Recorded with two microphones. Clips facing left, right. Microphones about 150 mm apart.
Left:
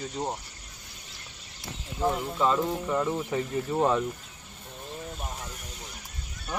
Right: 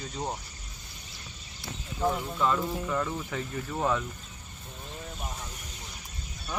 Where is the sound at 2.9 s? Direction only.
20° left (ahead or behind).